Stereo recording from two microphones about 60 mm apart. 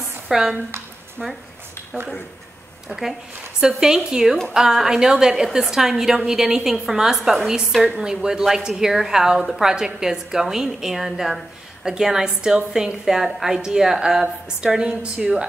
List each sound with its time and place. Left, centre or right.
0.3 s a woman's voice: centre
2.9 s a woman's voice: centre